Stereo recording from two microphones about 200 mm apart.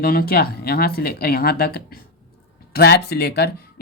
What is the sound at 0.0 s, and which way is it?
Speech, 50° left (ahead or behind).